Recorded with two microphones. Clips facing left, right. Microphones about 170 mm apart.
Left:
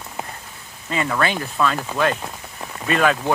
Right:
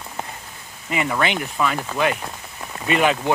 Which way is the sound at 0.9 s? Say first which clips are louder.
Even; 15° right (ahead or behind).